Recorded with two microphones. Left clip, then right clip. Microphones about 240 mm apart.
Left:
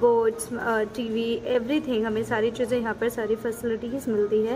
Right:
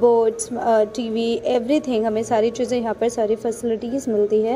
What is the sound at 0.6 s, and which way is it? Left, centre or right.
A woman's voice, centre.